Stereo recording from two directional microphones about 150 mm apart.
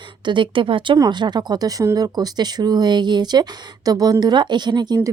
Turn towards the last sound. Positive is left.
turn(degrees=-30)  # may be behind; listen again after turning